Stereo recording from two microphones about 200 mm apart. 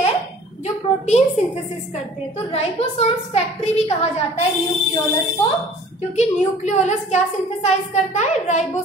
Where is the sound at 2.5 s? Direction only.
30° left (ahead or behind).